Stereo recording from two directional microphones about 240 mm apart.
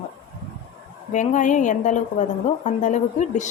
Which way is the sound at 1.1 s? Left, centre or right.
Left.